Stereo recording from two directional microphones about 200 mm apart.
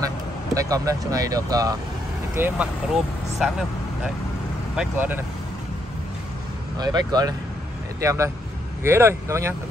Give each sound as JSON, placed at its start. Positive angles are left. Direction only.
{"t": 0.6, "sound": "speech", "side_deg": -15}
{"t": 6.8, "sound": "speech", "side_deg": -20}